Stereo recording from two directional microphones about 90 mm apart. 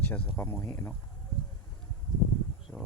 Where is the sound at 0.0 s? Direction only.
25° left (ahead or behind).